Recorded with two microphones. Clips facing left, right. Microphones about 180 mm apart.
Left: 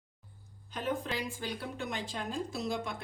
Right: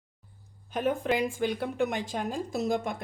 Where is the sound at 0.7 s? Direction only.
55° right (ahead or behind).